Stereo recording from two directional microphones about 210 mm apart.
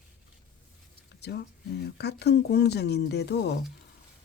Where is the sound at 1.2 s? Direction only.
50° left (ahead or behind).